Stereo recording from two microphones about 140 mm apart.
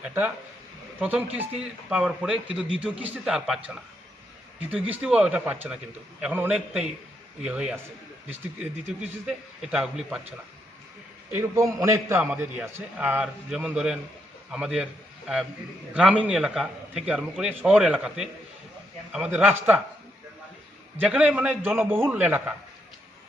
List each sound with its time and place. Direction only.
0.9 s speech: 10° right (ahead or behind)
4.7 s a man's voice: 10° right (ahead or behind)
9.2 s speech: 5° right (ahead or behind)
11.3 s a man's voice: 20° right (ahead or behind)
12.2 s a man's voice: 10° right (ahead or behind)
16.0 s a man's voice: 10° right (ahead or behind)
21.0 s a man's voice: 10° right (ahead or behind)